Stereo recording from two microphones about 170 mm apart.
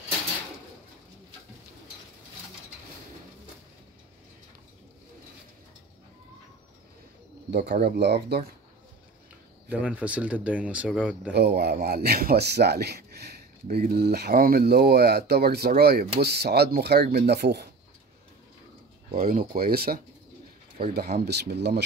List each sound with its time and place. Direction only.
7.8 s speech: 75° right (ahead or behind)
9.7 s speech: 10° right (ahead or behind)
11.3 s speech: 70° right (ahead or behind)
19.1 s speech: 55° right (ahead or behind); by 21.8 s 85° right